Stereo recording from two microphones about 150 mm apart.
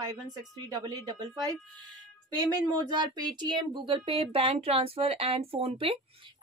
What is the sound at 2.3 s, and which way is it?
Speech, 25° right (ahead or behind).